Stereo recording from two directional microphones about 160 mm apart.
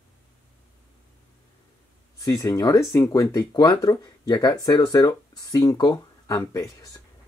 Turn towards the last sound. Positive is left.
turn(degrees=20)  # may be behind; listen again after turning